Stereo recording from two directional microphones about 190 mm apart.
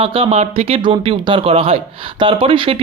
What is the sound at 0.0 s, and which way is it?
Speech, 30° right (ahead or behind).